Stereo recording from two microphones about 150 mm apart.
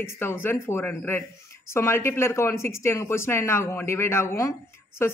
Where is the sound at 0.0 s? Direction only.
15° left (ahead or behind).